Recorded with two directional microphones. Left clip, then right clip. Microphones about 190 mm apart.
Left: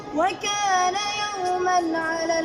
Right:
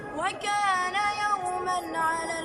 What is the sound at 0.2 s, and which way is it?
Music, 55° left (ahead or behind).